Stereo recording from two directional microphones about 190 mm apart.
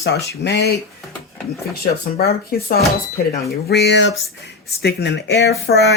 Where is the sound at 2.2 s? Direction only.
55° left (ahead or behind).